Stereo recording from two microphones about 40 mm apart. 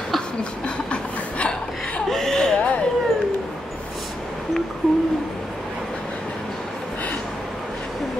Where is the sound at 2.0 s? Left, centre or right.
Centre.